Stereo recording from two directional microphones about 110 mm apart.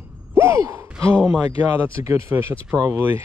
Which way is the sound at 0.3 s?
25° right (ahead or behind).